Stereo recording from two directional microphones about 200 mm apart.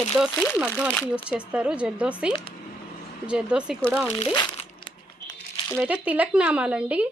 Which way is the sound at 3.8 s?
5° left (ahead or behind).